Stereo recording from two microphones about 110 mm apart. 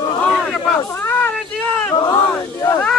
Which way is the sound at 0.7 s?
20° left (ahead or behind).